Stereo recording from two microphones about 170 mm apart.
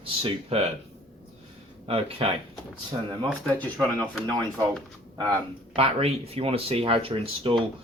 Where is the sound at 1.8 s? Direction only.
35° right (ahead or behind).